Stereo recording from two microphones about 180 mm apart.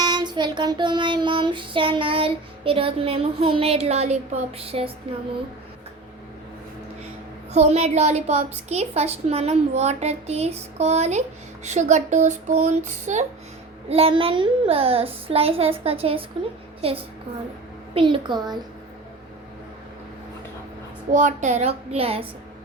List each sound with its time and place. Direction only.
0.0 s child singing: 25° right (ahead or behind)
7.5 s a woman's voice: 35° right (ahead or behind)
17.9 s child singing: 25° right (ahead or behind)
21.1 s a woman's voice: 45° right (ahead or behind)